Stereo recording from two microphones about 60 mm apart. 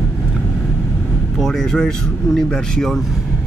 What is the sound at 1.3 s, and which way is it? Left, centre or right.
Speech, centre.